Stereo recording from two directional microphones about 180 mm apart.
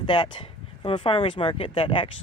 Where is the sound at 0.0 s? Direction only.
25° left (ahead or behind).